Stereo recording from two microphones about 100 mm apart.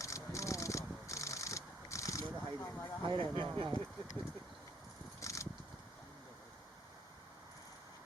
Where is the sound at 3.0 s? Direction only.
55° right (ahead or behind).